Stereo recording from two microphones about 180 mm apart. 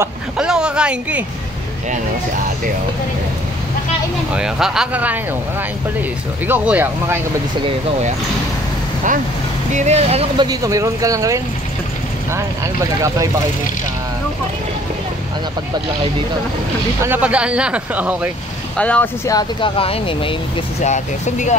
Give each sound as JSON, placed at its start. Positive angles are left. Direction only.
{"t": 0.0, "sound": "vehicle", "side_deg": -5}
{"t": 4.3, "sound": "speech", "side_deg": -5}
{"t": 6.4, "sound": "speech", "side_deg": -10}
{"t": 9.7, "sound": "speech", "side_deg": -40}
{"t": 17.0, "sound": "speech", "side_deg": -10}
{"t": 18.8, "sound": "speech", "side_deg": 5}
{"t": 19.2, "sound": "speech", "side_deg": 20}
{"t": 19.8, "sound": "speech", "side_deg": 30}
{"t": 20.8, "sound": "speech", "side_deg": 40}